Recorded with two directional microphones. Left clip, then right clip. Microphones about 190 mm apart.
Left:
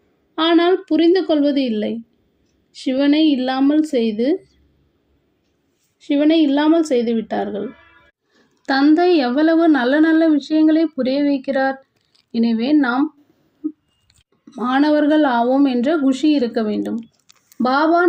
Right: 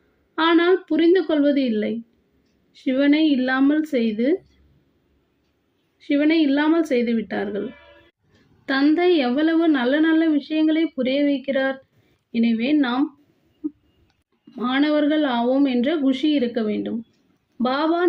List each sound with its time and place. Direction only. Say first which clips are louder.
0.3 s a woman's voice: left 2 dB; 15° left (ahead or behind)
6.0 s a woman's voice: left 4 dB; 15° left (ahead or behind)
8.6 s speech: left 4 dB; 20° left (ahead or behind)
14.7 s a woman's voice: left 5 dB; 15° left (ahead or behind)